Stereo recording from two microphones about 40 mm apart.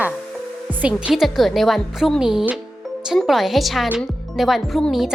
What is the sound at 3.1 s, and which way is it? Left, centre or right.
A woman's voice, centre.